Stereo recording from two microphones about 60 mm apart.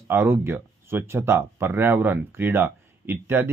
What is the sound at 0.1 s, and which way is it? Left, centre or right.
Speech, right.